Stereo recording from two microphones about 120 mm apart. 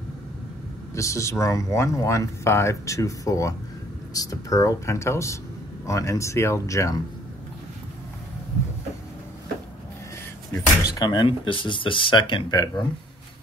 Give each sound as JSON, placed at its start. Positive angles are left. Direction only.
{"t": 0.9, "sound": "speech", "side_deg": 25}
{"t": 10.8, "sound": "speech", "side_deg": 35}